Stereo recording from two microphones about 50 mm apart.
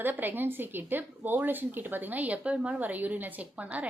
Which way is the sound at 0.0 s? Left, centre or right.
Right.